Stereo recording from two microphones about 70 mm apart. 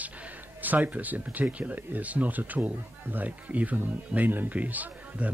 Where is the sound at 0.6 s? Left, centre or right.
Right.